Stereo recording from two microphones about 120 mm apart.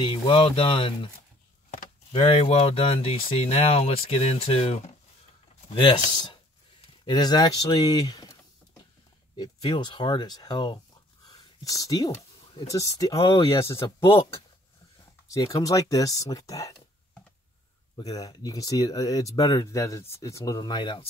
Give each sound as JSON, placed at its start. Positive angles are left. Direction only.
{"t": 0.0, "sound": "speech", "side_deg": 45}
{"t": 2.1, "sound": "speech", "side_deg": 55}
{"t": 5.7, "sound": "speech", "side_deg": 40}
{"t": 9.3, "sound": "speech", "side_deg": 45}
{"t": 15.3, "sound": "speech", "side_deg": 30}
{"t": 17.9, "sound": "speech", "side_deg": 30}